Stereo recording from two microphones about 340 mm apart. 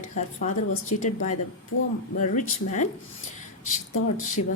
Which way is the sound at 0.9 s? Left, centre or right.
Left.